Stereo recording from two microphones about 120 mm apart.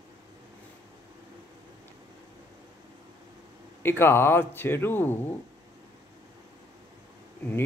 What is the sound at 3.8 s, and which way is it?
A man's voice, 20° left (ahead or behind).